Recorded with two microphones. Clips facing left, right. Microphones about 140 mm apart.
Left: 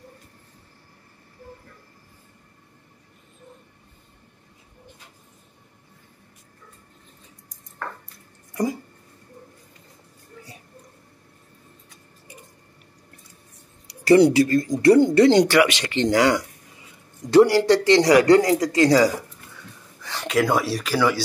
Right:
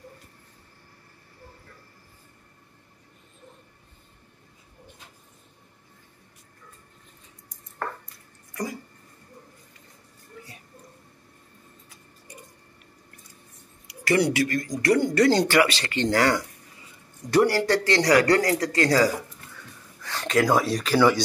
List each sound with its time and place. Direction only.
13.8 s a man's voice: 30° left (ahead or behind)
20.0 s a sound: 15° left (ahead or behind)
20.3 s speech: centre (ahead or behind)